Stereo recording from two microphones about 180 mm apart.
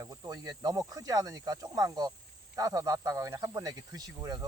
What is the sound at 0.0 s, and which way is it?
Speech, 20° right (ahead or behind).